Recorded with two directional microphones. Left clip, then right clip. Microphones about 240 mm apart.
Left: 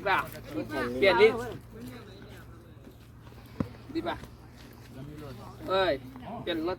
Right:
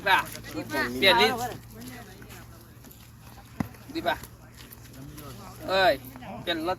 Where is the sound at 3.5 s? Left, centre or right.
Right.